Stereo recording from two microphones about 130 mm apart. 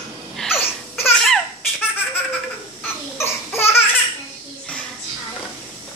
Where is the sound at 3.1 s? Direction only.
20° left (ahead or behind).